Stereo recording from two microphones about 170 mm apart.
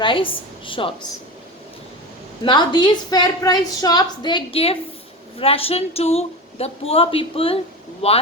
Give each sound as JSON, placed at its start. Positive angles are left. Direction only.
{"t": 0.0, "sound": "a woman's voice", "side_deg": 30}
{"t": 2.4, "sound": "a woman's voice", "side_deg": 25}